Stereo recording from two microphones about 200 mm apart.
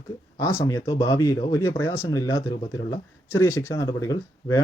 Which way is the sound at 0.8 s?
25° left (ahead or behind).